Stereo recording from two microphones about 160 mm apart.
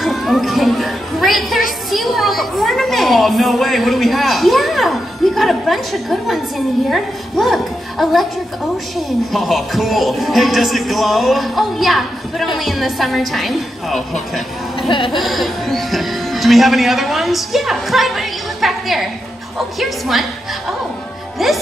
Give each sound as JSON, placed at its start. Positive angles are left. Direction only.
{"t": 0.0, "sound": "music", "side_deg": 0}
{"t": 1.9, "sound": "children playing", "side_deg": 0}
{"t": 6.9, "sound": "speech", "side_deg": 0}
{"t": 14.8, "sound": "speech", "side_deg": 30}
{"t": 15.1, "sound": "speech", "side_deg": 0}
{"t": 21.4, "sound": "speech", "side_deg": 0}